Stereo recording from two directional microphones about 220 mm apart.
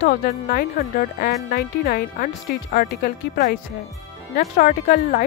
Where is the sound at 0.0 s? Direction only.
40° left (ahead or behind).